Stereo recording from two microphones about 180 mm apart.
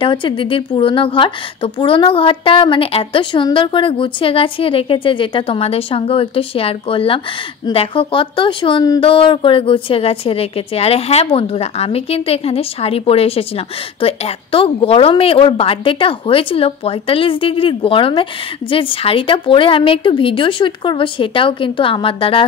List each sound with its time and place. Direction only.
0.0 s a woman's voice: 30° left (ahead or behind)